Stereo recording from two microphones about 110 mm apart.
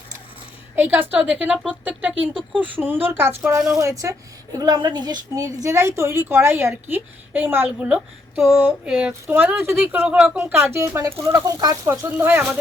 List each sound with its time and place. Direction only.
0.8 s a woman's voice: 15° right (ahead or behind)
8.5 s a woman's voice: 20° right (ahead or behind)
8.9 s a woman's voice: 10° right (ahead or behind)